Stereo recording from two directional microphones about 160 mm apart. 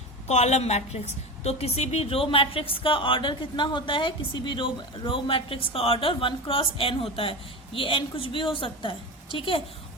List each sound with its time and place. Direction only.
0.3 s a woman's voice: 45° left (ahead or behind)